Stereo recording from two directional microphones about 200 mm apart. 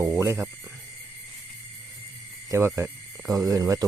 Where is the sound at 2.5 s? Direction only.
15° right (ahead or behind).